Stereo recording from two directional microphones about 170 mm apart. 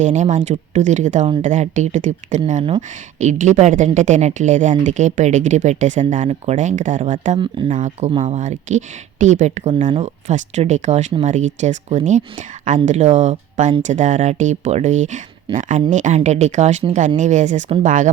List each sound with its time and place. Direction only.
0.0 s speech: 45° right (ahead or behind)
7.3 s speech: 30° right (ahead or behind)
7.7 s speech: 45° right (ahead or behind)